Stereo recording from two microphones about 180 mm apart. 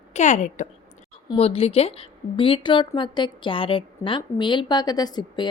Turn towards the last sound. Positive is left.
turn(degrees=25)  # may be behind; listen again after turning